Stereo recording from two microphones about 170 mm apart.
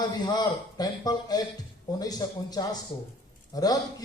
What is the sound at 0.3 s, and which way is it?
A man's voice, 25° left (ahead or behind).